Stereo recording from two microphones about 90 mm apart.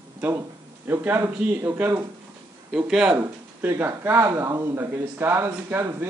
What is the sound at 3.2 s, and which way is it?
Speech, 25° right (ahead or behind).